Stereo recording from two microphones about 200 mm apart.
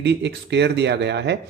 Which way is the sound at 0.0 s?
60° right (ahead or behind).